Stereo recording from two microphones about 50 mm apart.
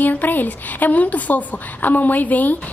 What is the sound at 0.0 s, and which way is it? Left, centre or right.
A woman's voice, left.